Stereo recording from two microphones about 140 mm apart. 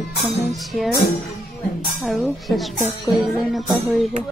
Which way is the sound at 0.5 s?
Centre (ahead or behind).